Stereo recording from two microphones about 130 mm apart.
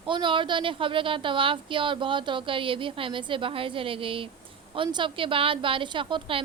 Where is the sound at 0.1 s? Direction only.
40° right (ahead or behind).